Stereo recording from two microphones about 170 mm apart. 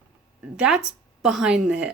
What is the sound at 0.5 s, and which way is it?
A woman's voice, 5° right (ahead or behind).